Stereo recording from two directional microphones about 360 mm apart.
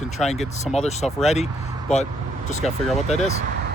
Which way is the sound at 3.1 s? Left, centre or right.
Centre.